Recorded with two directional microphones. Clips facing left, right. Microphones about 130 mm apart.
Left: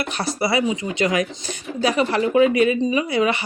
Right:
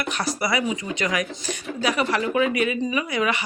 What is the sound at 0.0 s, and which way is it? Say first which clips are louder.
Speech: left 2 dB; 30° left (ahead or behind).